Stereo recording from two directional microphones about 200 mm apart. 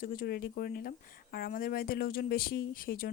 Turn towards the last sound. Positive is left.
turn(degrees=45)  # may be behind; listen again after turning